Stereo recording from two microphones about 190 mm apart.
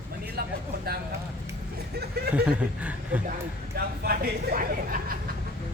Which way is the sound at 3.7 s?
55° right (ahead or behind).